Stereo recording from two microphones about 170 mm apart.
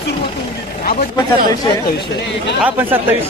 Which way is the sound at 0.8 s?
50° left (ahead or behind).